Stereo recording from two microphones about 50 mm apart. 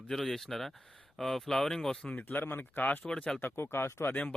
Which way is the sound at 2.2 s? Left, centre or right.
Left.